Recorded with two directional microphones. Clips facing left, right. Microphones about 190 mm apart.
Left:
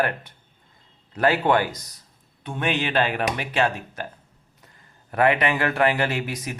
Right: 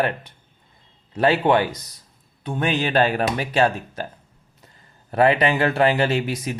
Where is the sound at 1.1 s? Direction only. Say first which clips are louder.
Right 2 dB; 25° right (ahead or behind).